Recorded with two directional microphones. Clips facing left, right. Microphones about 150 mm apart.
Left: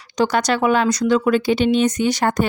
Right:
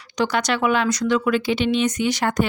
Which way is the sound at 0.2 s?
40° left (ahead or behind).